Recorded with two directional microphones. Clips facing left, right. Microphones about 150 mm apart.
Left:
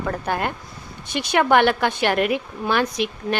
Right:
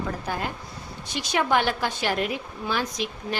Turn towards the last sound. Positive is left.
turn(degrees=65)  # may be behind; listen again after turning